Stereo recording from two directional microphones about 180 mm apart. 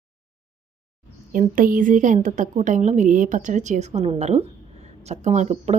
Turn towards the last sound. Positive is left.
turn(degrees=-40)  # may be behind; listen again after turning